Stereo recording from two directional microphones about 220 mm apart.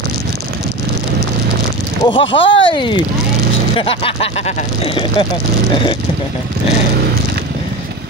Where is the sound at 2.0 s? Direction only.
20° left (ahead or behind).